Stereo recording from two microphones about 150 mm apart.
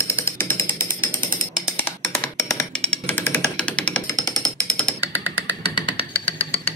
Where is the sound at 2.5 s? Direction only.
5° left (ahead or behind).